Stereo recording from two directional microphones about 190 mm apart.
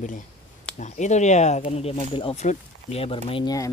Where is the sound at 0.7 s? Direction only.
40° left (ahead or behind).